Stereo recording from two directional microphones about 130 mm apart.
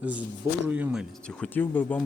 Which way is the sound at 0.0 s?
10° right (ahead or behind).